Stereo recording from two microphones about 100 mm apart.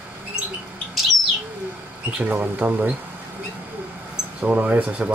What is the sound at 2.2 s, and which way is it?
Speech, 15° right (ahead or behind).